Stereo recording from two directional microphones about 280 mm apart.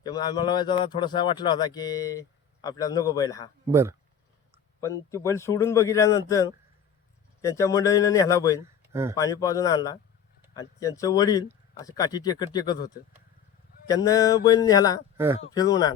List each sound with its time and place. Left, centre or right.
0.0 s speech: centre
3.7 s speech: centre
4.8 s speech: centre
8.6 s a sound: centre
9.1 s speech: centre